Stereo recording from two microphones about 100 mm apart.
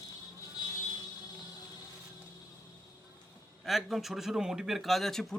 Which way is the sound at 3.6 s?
Centre (ahead or behind).